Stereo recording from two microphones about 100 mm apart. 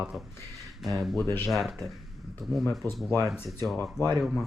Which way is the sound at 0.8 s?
Centre (ahead or behind).